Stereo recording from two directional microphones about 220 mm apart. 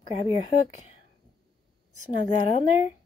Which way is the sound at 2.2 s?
30° left (ahead or behind).